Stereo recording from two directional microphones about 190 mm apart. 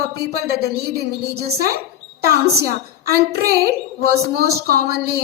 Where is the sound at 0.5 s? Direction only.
55° right (ahead or behind).